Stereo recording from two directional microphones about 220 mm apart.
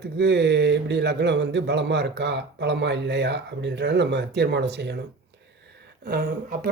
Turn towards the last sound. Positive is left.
turn(degrees=-40)  # may be behind; listen again after turning